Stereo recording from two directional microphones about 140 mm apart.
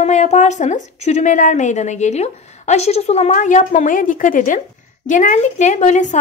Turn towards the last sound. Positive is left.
turn(degrees=60)  # may be behind; listen again after turning